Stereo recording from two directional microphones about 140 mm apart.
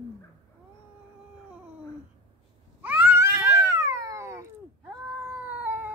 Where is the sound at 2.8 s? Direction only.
10° right (ahead or behind).